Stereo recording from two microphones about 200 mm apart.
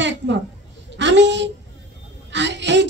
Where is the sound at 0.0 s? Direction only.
65° right (ahead or behind).